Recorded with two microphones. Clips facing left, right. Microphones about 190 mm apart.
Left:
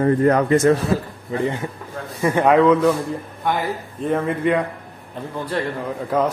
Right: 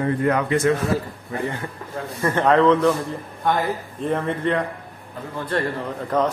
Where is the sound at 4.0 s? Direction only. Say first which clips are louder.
Left 3 dB; 5° left (ahead or behind).